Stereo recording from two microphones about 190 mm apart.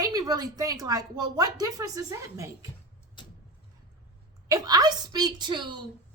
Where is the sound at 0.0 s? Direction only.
20° right (ahead or behind).